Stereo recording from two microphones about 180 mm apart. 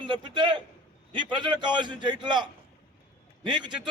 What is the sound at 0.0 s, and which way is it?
A man's voice, 25° right (ahead or behind).